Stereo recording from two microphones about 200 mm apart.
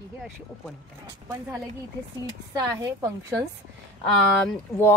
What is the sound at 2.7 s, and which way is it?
Speech, 15° right (ahead or behind).